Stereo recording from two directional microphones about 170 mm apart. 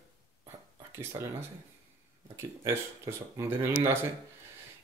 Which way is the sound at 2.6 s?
15° right (ahead or behind).